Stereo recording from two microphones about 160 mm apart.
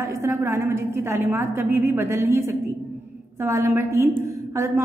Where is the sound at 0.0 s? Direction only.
20° right (ahead or behind).